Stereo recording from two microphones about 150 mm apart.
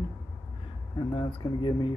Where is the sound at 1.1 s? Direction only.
30° left (ahead or behind).